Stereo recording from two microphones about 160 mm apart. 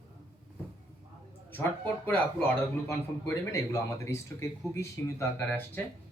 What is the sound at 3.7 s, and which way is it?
Speech, 20° left (ahead or behind).